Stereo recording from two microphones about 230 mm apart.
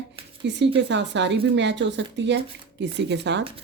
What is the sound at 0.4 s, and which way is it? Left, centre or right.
Speech, right.